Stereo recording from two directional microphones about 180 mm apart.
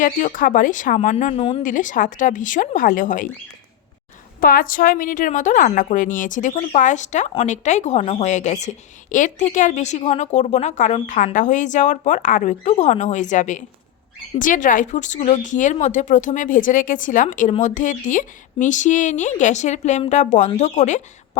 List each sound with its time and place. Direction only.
0.0 s speech: 45° left (ahead or behind)
1.6 s speech: 45° left (ahead or behind)
4.4 s a woman's voice: 50° left (ahead or behind)